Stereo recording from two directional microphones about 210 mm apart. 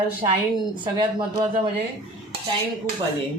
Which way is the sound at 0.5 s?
20° right (ahead or behind).